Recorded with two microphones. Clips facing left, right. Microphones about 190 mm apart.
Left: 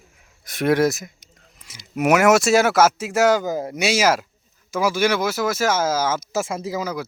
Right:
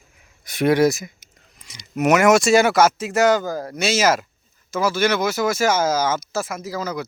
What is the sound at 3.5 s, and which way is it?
Speech, 20° left (ahead or behind).